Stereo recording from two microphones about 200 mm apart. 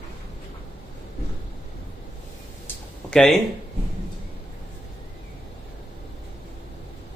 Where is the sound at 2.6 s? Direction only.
5° left (ahead or behind).